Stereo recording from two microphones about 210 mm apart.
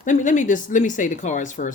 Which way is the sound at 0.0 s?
35° left (ahead or behind).